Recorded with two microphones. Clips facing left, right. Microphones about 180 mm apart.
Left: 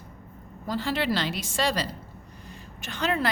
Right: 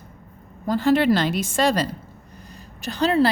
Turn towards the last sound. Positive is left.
turn(degrees=-35)  # may be behind; listen again after turning